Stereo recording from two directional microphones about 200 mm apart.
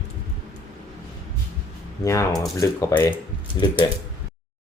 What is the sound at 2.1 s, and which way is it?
Speech, 15° left (ahead or behind).